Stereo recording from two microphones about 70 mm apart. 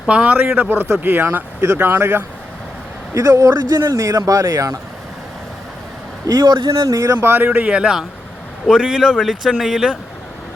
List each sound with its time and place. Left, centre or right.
0.1 s speech: centre
0.5 s speech: right
3.2 s a man's voice: right
3.8 s a man's voice: right
6.2 s speech: right
6.7 s speech: right
7.2 s speech: right; by 9.9 s centre